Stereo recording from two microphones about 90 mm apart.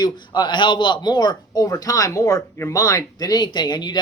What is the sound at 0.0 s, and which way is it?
Speech, 55° left (ahead or behind).